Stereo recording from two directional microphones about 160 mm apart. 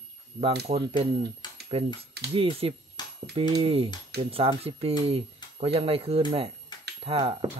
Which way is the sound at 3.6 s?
35° right (ahead or behind).